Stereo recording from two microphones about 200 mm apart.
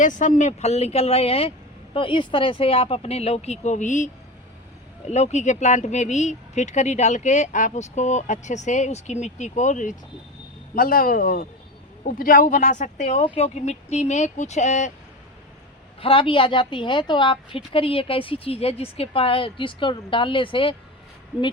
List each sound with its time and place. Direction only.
0.0 s speech: 40° left (ahead or behind)
16.0 s a woman's voice: 25° left (ahead or behind)